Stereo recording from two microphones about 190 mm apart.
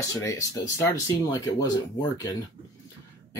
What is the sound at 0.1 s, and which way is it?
Speech, 15° left (ahead or behind).